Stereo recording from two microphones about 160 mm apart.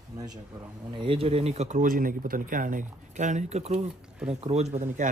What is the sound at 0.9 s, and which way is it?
Speech, 35° right (ahead or behind).